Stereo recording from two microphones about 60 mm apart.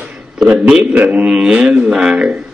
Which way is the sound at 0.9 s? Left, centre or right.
Right.